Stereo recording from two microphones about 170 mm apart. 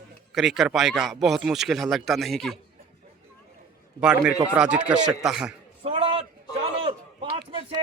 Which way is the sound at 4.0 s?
5° right (ahead or behind).